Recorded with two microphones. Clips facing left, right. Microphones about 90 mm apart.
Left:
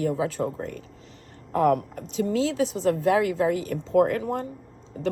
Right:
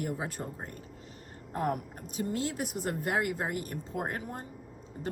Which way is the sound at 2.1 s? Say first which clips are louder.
Left 9 dB; 90° left.